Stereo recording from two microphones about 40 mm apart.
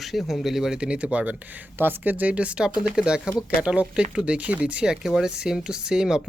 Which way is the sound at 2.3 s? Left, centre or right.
Right.